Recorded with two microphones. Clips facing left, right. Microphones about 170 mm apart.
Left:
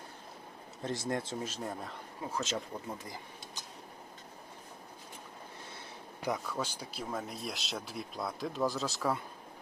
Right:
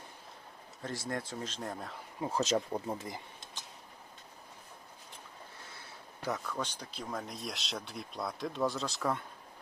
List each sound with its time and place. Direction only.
0.8 s speech: 20° left (ahead or behind)
1.4 s speech: 10° left (ahead or behind)
2.3 s speech: 35° right (ahead or behind)
6.2 s speech: 10° left (ahead or behind)